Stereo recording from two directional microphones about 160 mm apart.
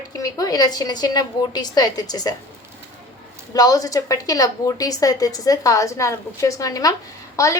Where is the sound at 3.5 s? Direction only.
25° left (ahead or behind).